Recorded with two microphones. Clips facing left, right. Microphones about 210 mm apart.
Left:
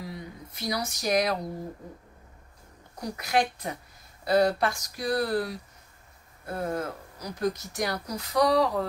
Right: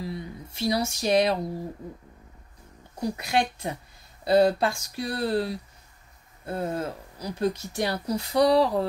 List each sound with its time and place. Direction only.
0.5 s speech: 25° right (ahead or behind)
3.0 s speech: 25° right (ahead or behind)